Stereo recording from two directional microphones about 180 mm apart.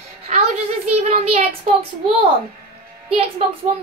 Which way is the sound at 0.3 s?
35° right (ahead or behind).